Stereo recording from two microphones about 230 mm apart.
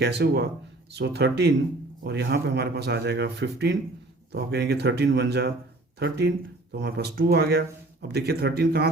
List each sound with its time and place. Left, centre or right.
0.0 s speech: right